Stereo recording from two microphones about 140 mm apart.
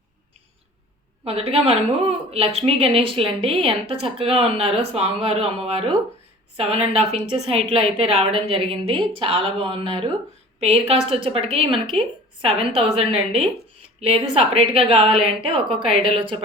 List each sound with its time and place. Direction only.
1.2 s a woman's voice: 45° right (ahead or behind)